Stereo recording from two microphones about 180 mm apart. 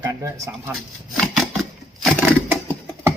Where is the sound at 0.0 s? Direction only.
15° right (ahead or behind).